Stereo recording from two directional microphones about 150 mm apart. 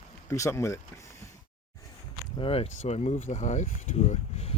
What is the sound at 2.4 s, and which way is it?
Speech, 40° left (ahead or behind).